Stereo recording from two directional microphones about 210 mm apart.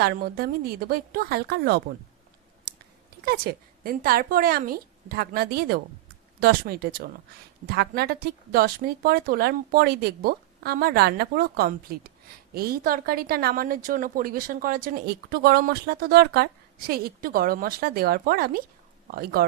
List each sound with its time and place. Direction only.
0.0 s a woman's voice: 50° right (ahead or behind)
3.2 s a woman's voice: 45° right (ahead or behind)